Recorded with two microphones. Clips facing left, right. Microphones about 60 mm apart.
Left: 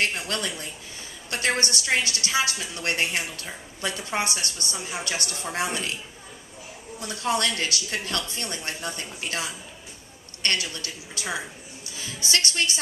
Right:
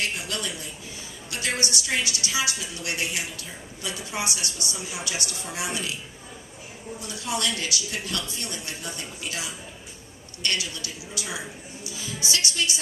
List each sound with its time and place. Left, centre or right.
0.0 s a woman's voice: left
7.0 s a woman's voice: left